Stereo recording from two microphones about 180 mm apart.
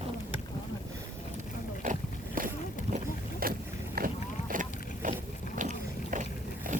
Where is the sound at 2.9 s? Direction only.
55° right (ahead or behind).